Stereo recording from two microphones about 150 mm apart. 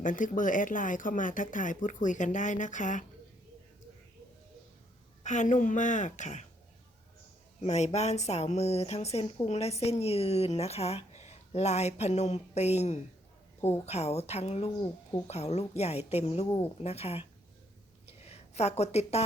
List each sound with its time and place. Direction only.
0.0 s speech: 60° left (ahead or behind)
5.2 s speech: 55° left (ahead or behind)
7.6 s speech: 45° left (ahead or behind)
13.6 s a woman's voice: 15° left (ahead or behind)
13.8 s speech: 45° left (ahead or behind)
18.0 s a sound: 45° left (ahead or behind)